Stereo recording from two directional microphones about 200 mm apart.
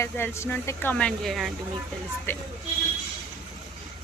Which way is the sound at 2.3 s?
10° left (ahead or behind).